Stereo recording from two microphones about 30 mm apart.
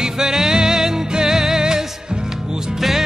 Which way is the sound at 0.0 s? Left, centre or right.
Centre.